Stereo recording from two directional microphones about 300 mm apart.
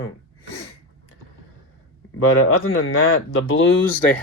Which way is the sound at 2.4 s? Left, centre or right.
Left.